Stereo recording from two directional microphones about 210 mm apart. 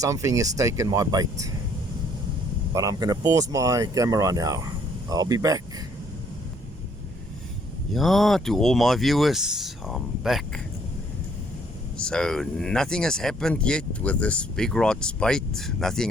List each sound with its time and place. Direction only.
0.0 s speech: 15° right (ahead or behind)
2.7 s speech: 15° right (ahead or behind)
7.9 s speech: centre (ahead or behind)
11.9 s speech: 5° left (ahead or behind)